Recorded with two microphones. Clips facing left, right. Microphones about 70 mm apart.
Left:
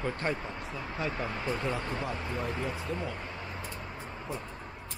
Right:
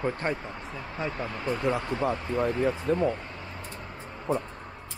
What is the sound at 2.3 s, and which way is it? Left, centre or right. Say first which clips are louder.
Speech: right 8 dB; right.